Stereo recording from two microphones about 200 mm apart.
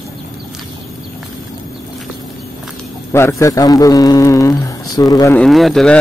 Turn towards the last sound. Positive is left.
turn(degrees=0)  # may be behind; listen again after turning